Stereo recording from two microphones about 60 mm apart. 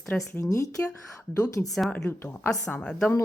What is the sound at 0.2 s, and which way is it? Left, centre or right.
Speech, left.